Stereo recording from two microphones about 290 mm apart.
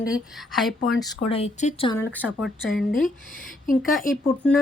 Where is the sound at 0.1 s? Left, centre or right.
Centre.